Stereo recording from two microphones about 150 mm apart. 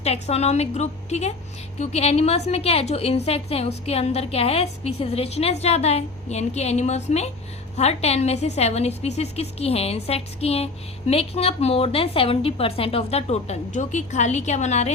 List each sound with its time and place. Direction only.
0.0 s a woman's voice: 45° left (ahead or behind)